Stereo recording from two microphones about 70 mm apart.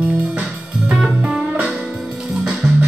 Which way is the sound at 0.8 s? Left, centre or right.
Centre.